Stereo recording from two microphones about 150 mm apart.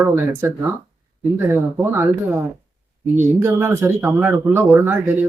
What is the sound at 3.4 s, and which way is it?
Speech, 15° right (ahead or behind).